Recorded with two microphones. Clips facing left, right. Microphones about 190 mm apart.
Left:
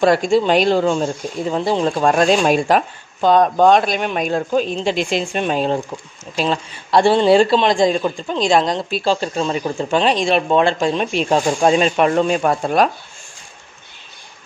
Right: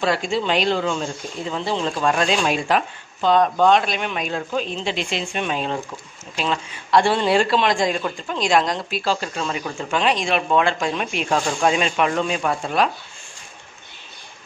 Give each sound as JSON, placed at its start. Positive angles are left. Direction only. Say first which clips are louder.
{"t": 0.0, "sound": "a man's voice", "louder": "left 7 dB", "side_deg": 45}